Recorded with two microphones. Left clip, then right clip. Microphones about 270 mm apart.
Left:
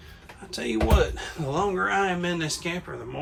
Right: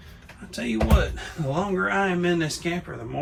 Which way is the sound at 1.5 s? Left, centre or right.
Centre.